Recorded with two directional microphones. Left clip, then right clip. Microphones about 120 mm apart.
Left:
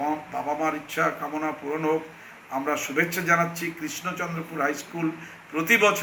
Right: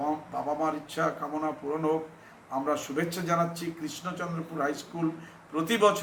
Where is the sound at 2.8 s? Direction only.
15° right (ahead or behind).